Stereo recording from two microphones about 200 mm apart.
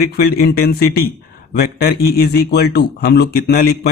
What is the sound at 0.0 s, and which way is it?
Speech, 50° left (ahead or behind).